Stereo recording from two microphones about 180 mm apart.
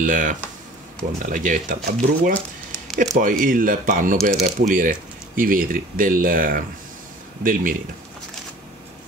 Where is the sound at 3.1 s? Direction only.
50° right (ahead or behind).